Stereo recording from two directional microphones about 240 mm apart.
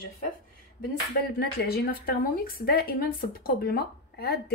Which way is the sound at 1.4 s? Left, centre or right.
Left.